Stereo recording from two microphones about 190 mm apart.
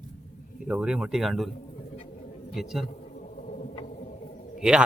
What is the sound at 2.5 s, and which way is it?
Speech, centre (ahead or behind).